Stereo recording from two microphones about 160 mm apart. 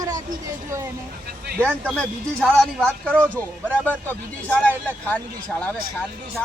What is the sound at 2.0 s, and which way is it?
Speech, 5° left (ahead or behind).